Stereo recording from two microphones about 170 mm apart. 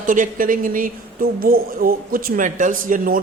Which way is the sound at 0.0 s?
50° right (ahead or behind).